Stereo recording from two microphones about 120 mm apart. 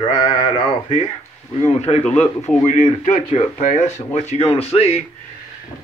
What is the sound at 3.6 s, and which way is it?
Speech, 85° left.